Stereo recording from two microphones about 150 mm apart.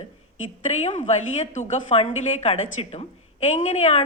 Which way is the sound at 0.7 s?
50° left (ahead or behind).